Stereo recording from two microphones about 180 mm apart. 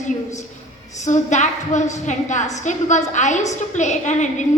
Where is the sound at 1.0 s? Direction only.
40° left (ahead or behind).